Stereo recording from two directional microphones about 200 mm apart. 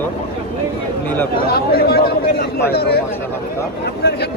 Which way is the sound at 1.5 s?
50° left (ahead or behind).